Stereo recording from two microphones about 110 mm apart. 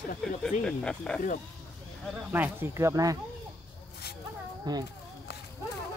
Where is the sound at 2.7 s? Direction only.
30° right (ahead or behind).